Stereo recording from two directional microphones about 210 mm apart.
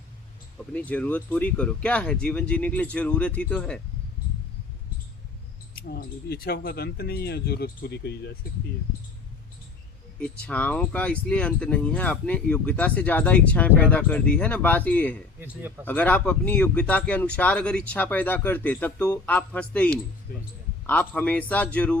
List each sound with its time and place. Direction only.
0.7 s speech: 5° left (ahead or behind)
5.7 s speech: 45° left (ahead or behind)
10.2 s speech: 5° left (ahead or behind)
15.4 s a man's voice: 10° right (ahead or behind)
15.9 s speech: 10° left (ahead or behind)
20.3 s speech: 45° left (ahead or behind)
20.8 s speech: 10° left (ahead or behind)